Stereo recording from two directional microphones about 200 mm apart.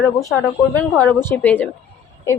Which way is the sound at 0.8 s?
5° left (ahead or behind).